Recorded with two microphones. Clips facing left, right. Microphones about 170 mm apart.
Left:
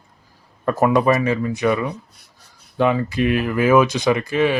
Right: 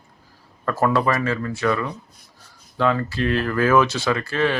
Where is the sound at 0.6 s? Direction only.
20° left (ahead or behind).